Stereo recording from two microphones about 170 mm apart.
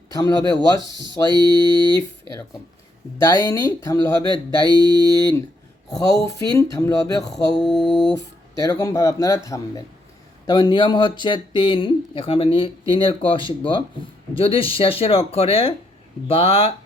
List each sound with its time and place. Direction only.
0.1 s speech: 20° left (ahead or behind)
1.0 s mantra: 25° right (ahead or behind)
3.2 s speech: 20° left (ahead or behind)
4.6 s mantra: 25° right (ahead or behind)
5.9 s speech: 20° left (ahead or behind)
7.3 s mantra: centre (ahead or behind)
8.6 s speech: 20° left (ahead or behind)